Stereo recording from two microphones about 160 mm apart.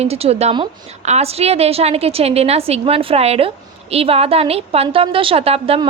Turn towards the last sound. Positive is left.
turn(degrees=-35)  # may be behind; listen again after turning